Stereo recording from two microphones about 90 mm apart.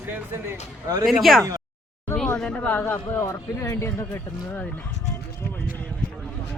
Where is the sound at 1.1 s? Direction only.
Centre (ahead or behind).